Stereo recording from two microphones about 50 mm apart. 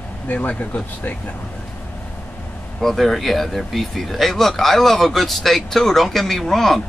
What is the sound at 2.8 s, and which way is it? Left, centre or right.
Speech, centre.